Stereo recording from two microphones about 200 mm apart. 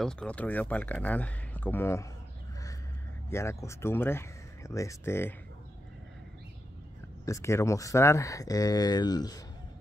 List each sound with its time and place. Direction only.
0.0 s speech: 5° left (ahead or behind)
3.3 s speech: 15° left (ahead or behind)
7.2 s speech: 15° left (ahead or behind)